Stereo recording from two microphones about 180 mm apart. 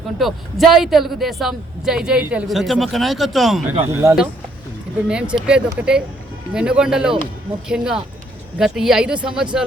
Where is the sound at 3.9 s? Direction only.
15° right (ahead or behind).